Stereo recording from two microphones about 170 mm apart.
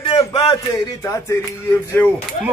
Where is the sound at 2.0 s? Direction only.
10° left (ahead or behind).